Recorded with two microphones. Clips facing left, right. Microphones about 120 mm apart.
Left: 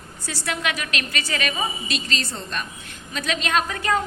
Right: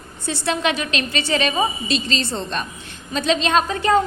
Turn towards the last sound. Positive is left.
turn(degrees=-25)  # may be behind; listen again after turning